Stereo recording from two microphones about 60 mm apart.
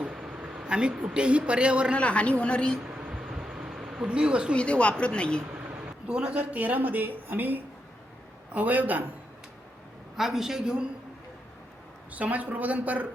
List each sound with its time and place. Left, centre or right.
0.1 s a man's voice: centre
2.0 s a man's voice: centre
3.0 s a sound: centre
4.5 s a woman's voice: centre
6.1 s a woman's voice: centre
10.2 s speech: centre
12.1 s a woman's voice: right